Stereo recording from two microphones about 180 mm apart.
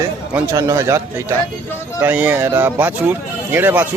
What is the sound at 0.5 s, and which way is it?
Speech, 15° right (ahead or behind).